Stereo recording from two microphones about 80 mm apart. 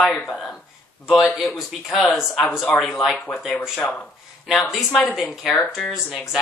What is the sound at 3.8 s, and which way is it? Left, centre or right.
Speech, centre.